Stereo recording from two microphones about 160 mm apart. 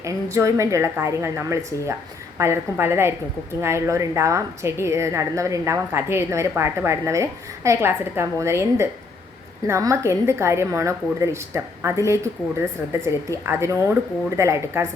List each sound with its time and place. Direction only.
0.0 s a woman's voice: 20° right (ahead or behind)